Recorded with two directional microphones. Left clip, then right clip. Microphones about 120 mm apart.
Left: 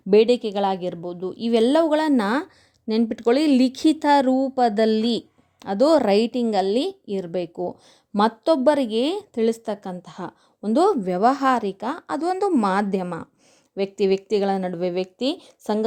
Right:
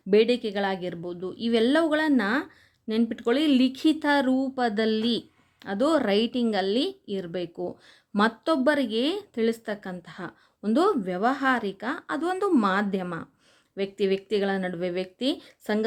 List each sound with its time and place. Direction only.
0.1 s a woman's voice: 40° left (ahead or behind)
12.6 s a woman's voice: 40° left (ahead or behind)